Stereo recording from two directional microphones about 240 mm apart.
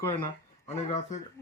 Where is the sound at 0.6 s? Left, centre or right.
Left.